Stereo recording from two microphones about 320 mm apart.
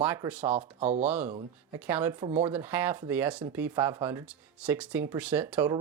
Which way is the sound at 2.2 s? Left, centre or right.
Centre.